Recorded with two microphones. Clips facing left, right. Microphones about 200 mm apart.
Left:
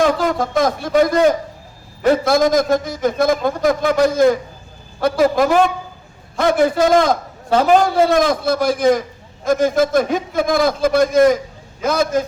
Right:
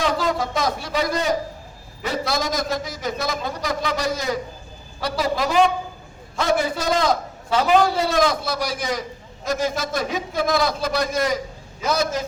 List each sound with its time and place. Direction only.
0.0 s a man's voice: 50° left (ahead or behind)